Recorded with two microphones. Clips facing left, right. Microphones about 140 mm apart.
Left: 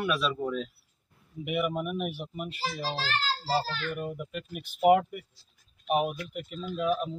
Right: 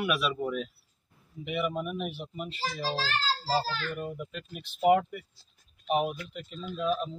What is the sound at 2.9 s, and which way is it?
Speech, 35° right (ahead or behind).